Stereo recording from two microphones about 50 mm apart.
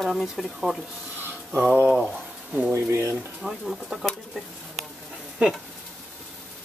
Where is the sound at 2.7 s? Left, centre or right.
Right.